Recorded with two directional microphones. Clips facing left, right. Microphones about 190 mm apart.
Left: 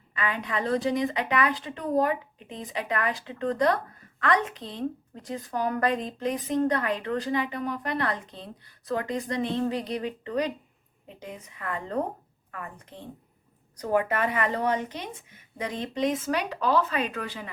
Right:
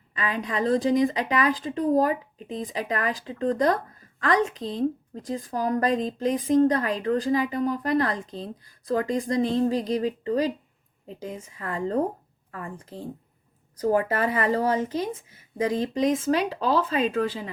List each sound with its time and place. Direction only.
0.1 s speech: 35° right (ahead or behind)